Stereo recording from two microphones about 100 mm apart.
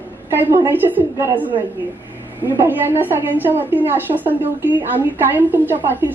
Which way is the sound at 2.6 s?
20° right (ahead or behind).